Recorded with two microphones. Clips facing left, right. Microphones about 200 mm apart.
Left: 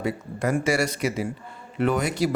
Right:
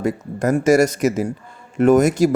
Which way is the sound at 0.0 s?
45° right (ahead or behind).